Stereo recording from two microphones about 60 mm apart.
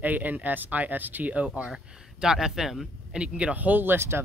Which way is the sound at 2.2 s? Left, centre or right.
Centre.